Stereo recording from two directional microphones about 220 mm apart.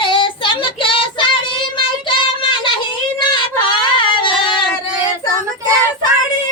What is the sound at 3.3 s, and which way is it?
Yodeling, 20° left (ahead or behind).